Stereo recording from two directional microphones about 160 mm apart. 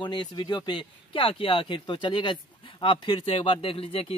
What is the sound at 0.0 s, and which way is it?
Speech, 30° left (ahead or behind).